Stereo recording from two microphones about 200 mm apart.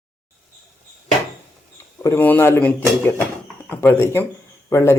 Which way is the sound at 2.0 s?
10° left (ahead or behind).